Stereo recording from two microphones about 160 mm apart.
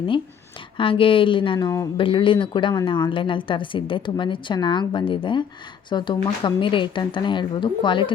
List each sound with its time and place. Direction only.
0.8 s a woman's voice: 35° left (ahead or behind)